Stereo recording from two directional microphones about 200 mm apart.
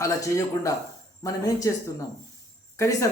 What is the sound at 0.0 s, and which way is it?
Speech, 15° left (ahead or behind).